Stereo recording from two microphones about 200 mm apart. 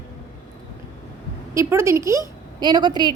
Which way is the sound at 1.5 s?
15° right (ahead or behind).